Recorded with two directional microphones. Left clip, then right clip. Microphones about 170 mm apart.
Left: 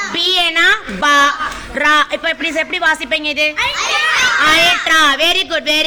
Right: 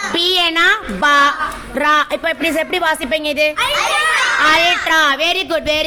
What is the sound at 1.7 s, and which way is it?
A woman's voice, 5° right (ahead or behind).